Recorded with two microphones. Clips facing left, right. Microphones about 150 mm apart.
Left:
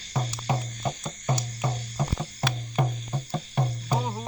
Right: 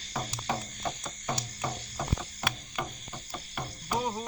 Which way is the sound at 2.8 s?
45° left (ahead or behind).